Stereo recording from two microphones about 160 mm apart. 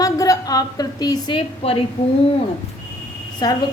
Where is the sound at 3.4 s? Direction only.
25° left (ahead or behind).